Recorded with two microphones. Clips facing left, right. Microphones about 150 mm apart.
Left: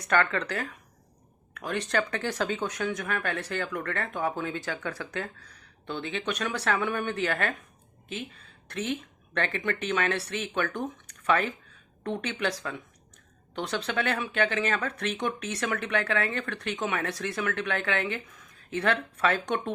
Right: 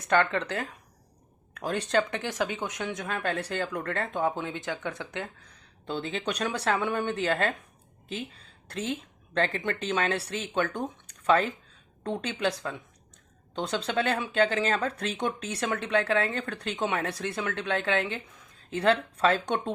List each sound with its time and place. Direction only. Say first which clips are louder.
0.1 s speech: right 1 dB; 25° right (ahead or behind)
1.9 s speech: right 2 dB; 20° right (ahead or behind)
5.8 s speech: right 1 dB; 30° right (ahead or behind)
8.7 s speech: left 1 dB; 30° right (ahead or behind)